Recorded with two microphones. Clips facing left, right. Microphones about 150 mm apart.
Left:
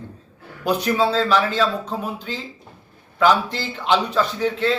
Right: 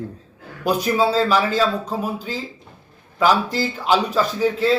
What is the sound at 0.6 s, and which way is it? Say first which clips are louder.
A man's voice: right 1 dB; 10° right (ahead or behind).